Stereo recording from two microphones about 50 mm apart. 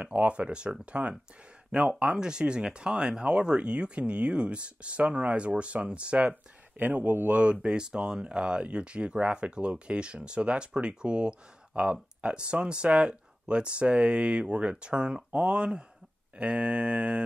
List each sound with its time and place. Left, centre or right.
0.0 s speech: right
2.1 s speech: centre
6.8 s speech: right
7.6 s speech: centre